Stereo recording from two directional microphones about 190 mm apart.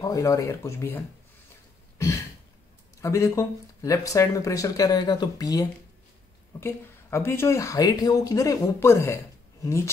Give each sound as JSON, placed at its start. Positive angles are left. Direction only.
{"t": 0.0, "sound": "speech", "side_deg": 15}
{"t": 3.0, "sound": "speech", "side_deg": 15}